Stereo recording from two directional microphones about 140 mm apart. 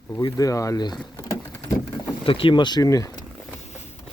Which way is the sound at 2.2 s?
40° left (ahead or behind).